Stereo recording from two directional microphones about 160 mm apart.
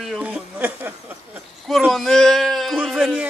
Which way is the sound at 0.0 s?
5° right (ahead or behind).